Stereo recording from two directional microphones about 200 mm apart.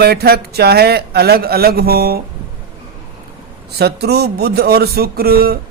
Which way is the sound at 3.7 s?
55° right (ahead or behind).